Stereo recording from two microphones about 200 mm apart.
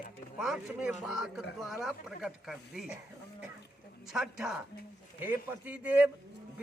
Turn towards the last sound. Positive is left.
turn(degrees=-5)  # may be behind; listen again after turning